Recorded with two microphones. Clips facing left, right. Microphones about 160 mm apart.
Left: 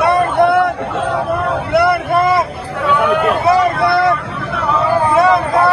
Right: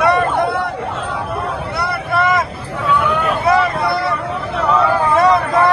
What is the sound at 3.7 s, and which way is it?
Vehicle, 75° left (ahead or behind).